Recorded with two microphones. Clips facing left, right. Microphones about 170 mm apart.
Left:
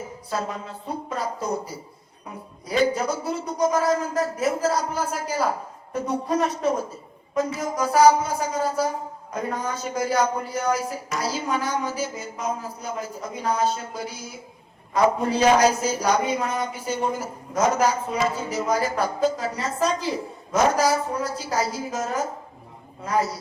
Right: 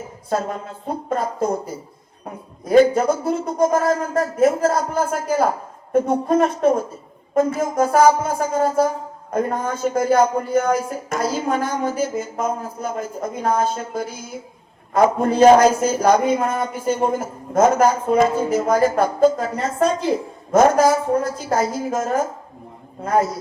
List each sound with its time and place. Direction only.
0.3 s speech: 50° right (ahead or behind)